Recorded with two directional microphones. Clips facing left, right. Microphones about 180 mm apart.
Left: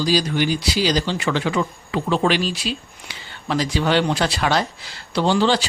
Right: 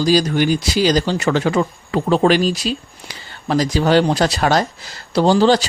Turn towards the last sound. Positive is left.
turn(degrees=-40)  # may be behind; listen again after turning